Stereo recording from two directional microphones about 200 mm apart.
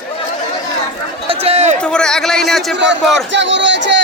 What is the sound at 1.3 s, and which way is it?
Run, 30° right (ahead or behind).